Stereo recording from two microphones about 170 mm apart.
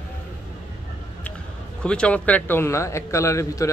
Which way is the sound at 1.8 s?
5° left (ahead or behind).